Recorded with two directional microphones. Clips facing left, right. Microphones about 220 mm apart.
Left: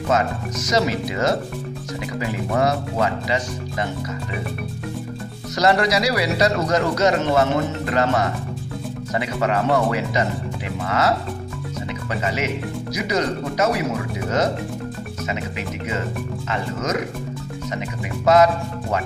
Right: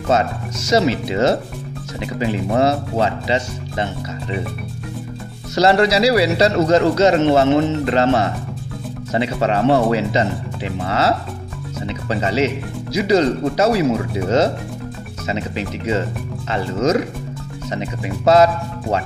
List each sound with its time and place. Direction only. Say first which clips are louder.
0.1 s speech: right 3 dB; 30° right (ahead or behind)
5.5 s speech: right 4 dB; 30° right (ahead or behind)